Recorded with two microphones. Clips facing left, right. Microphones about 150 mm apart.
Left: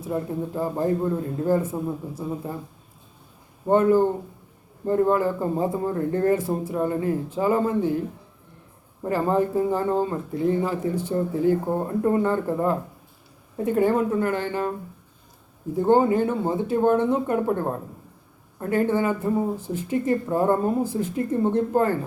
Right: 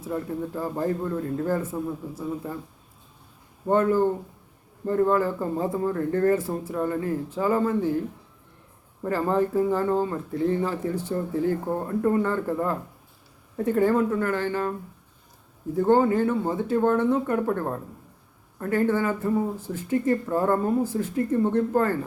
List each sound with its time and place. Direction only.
0.1 s speech: 20° left (ahead or behind)
3.7 s speech: 20° left (ahead or behind)
9.0 s speech: 20° left (ahead or behind)